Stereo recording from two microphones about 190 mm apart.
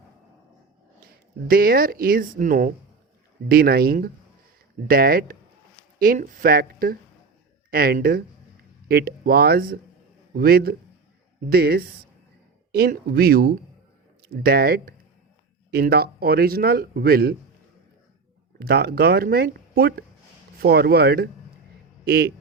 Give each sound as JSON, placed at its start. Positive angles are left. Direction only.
{"t": 1.5, "sound": "a man's voice", "side_deg": -50}
{"t": 18.6, "sound": "a man's voice", "side_deg": -55}